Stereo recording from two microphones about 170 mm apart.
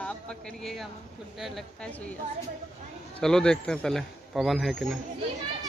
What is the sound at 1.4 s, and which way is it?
Speech, 5° left (ahead or behind).